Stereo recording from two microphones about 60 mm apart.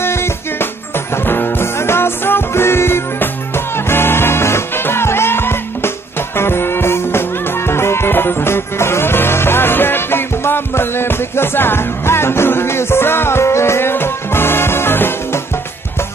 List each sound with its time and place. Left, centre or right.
0.0 s music: left